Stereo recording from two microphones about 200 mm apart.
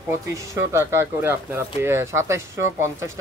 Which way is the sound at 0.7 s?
15° right (ahead or behind).